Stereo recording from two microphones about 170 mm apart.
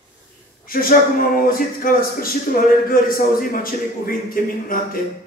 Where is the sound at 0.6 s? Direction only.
55° left (ahead or behind).